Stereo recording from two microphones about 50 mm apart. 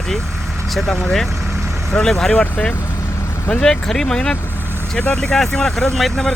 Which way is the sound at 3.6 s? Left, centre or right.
Centre.